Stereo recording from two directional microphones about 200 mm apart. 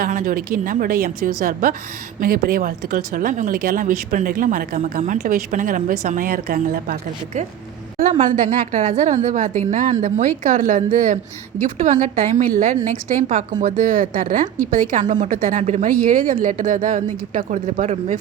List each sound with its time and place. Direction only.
0.0 s a woman's voice: 45° right (ahead or behind)